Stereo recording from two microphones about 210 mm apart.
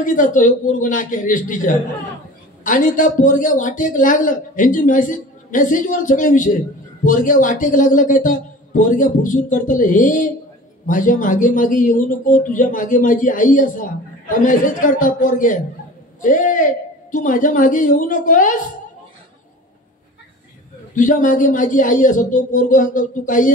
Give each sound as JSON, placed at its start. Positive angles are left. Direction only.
{"t": 0.0, "sound": "a man's voice", "side_deg": 40}
{"t": 20.9, "sound": "a man's voice", "side_deg": 40}